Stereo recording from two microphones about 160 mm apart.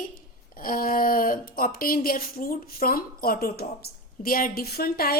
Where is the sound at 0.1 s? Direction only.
60° left (ahead or behind).